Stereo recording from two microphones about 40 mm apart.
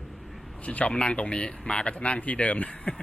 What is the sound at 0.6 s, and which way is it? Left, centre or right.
Speech, left.